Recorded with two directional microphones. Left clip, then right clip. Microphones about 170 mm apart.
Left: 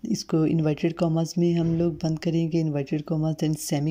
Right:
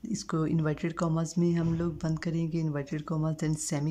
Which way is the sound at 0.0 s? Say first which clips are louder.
Left 8 dB; 10° left (ahead or behind).